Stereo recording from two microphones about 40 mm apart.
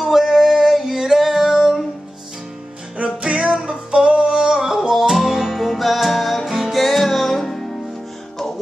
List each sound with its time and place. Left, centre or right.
0.0 s music: centre
0.7 s female singing: centre
3.0 s music: right
3.9 s singing: right
4.9 s music: centre